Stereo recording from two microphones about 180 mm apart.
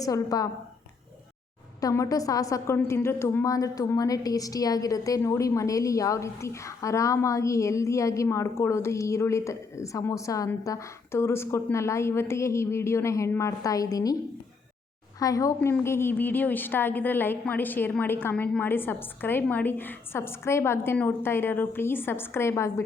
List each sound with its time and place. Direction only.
0.0 s a woman's voice: 20° left (ahead or behind)
1.8 s a woman's voice: 20° left (ahead or behind)
15.2 s a woman's voice: 20° left (ahead or behind)